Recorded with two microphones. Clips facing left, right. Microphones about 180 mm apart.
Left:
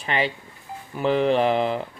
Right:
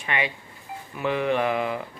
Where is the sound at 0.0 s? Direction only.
30° left (ahead or behind).